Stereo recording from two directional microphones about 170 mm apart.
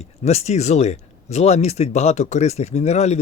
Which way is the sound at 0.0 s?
40° left (ahead or behind).